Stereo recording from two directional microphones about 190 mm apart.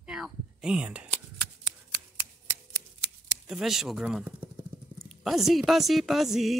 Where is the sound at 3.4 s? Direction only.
Centre (ahead or behind).